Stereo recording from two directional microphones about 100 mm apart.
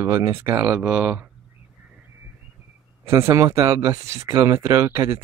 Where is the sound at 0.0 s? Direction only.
25° right (ahead or behind).